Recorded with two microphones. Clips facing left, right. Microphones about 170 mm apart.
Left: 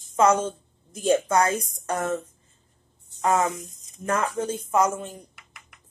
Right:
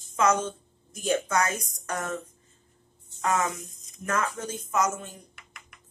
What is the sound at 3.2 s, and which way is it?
Speech, 30° left (ahead or behind).